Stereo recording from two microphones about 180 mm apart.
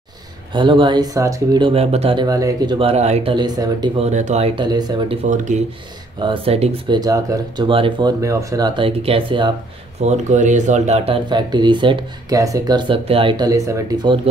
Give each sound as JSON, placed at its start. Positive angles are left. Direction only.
{"t": 0.5, "sound": "speech", "side_deg": -25}
{"t": 1.7, "sound": "speech", "side_deg": -35}
{"t": 3.3, "sound": "speech", "side_deg": -20}
{"t": 4.0, "sound": "speech", "side_deg": -40}
{"t": 4.6, "sound": "speech", "side_deg": -20}
{"t": 5.3, "sound": "speech", "side_deg": -40}
{"t": 6.1, "sound": "speech", "side_deg": -25}
{"t": 7.0, "sound": "speech", "side_deg": -20}
{"t": 8.2, "sound": "speech", "side_deg": -15}